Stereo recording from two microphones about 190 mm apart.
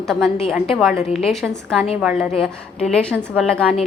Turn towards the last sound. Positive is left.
turn(degrees=0)  # may be behind; listen again after turning